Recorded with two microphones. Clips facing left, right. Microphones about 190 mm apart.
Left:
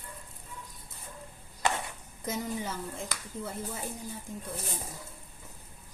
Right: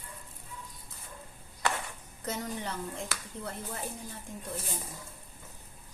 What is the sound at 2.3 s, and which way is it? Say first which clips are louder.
A woman's voice: left 2 dB; 5° left (ahead or behind).